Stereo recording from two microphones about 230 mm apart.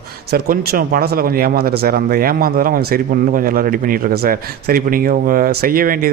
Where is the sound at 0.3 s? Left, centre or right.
Right.